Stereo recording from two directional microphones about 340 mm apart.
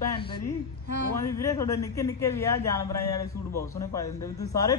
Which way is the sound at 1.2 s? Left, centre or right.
Centre.